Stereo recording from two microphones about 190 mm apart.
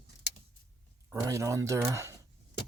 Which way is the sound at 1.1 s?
15° right (ahead or behind).